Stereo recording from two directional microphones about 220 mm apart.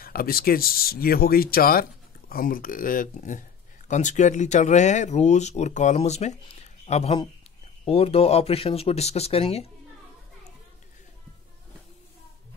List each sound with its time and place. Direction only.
0.0 s speech: 40° left (ahead or behind)